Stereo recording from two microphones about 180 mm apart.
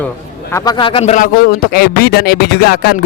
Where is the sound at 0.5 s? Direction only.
20° left (ahead or behind); by 2.9 s 60° left (ahead or behind).